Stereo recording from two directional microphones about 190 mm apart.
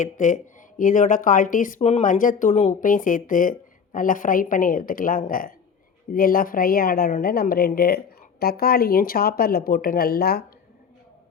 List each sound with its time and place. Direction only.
0.0 s a woman's voice: 40° left (ahead or behind)